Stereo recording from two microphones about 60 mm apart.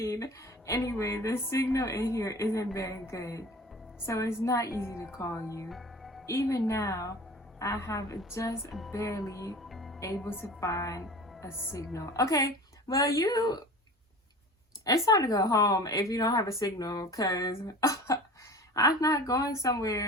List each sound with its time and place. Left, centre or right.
0.0 s a woman's voice: left
5.6 s speech: centre
6.2 s a woman's voice: left
9.6 s music: centre
10.2 s a woman's voice: left
10.7 s a woman's voice: left
14.8 s a woman's voice: left
18.7 s speech: left